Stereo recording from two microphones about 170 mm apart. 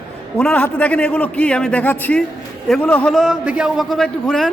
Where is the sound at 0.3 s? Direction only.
10° left (ahead or behind).